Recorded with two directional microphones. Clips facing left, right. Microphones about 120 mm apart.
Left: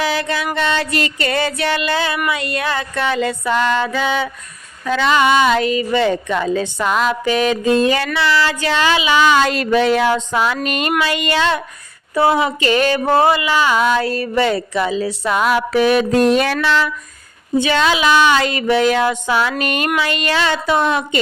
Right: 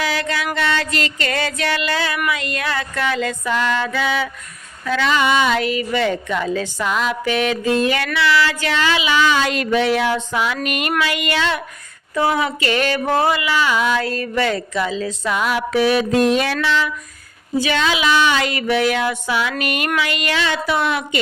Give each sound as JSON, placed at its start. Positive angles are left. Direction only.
{"t": 0.0, "sound": "music", "side_deg": 25}
{"t": 0.5, "sound": "a woman's voice", "side_deg": 25}
{"t": 2.1, "sound": "a woman's voice", "side_deg": 15}
{"t": 4.9, "sound": "a woman's voice", "side_deg": 35}
{"t": 6.7, "sound": "music", "side_deg": 40}
{"t": 9.3, "sound": "music", "side_deg": 40}
{"t": 11.0, "sound": "a woman's voice", "side_deg": 30}
{"t": 12.1, "sound": "music", "side_deg": 30}
{"t": 12.5, "sound": "a woman's voice", "side_deg": 20}
{"t": 13.5, "sound": "music", "side_deg": 35}
{"t": 14.0, "sound": "a sound", "side_deg": 15}
{"t": 15.2, "sound": "music", "side_deg": 40}
{"t": 17.7, "sound": "music", "side_deg": 40}